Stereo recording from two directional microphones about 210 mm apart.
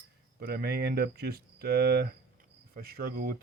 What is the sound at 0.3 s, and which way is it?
Speech, 50° right (ahead or behind).